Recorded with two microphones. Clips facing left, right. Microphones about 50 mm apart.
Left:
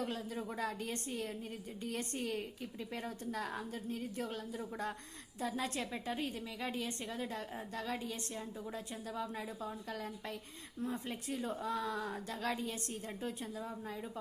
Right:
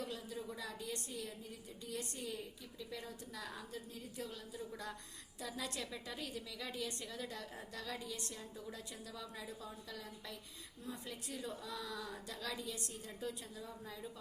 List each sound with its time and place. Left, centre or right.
0.0 s a woman's voice: left